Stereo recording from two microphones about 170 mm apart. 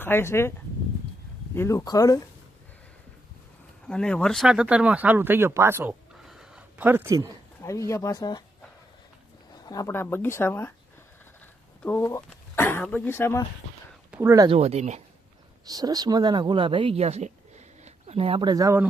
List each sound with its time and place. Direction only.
0.0 s speech: 15° left (ahead or behind)
1.5 s speech: 15° left (ahead or behind)
3.8 s speech: 5° left (ahead or behind); by 7.3 s 15° right (ahead or behind)
7.6 s speech: 15° left (ahead or behind)
9.6 s speech: 20° left (ahead or behind)
11.8 s speech: 15° left (ahead or behind)
14.1 s speech: 15° right (ahead or behind)
14.4 s speech: 35° right (ahead or behind)
15.6 s speech: 20° right (ahead or behind)